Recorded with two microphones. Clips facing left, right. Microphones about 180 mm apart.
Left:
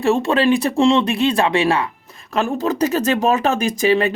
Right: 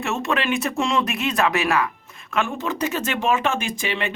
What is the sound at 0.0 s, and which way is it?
Speech, 30° left (ahead or behind).